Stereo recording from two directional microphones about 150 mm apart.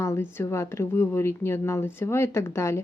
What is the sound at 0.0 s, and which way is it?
Speech, 15° left (ahead or behind).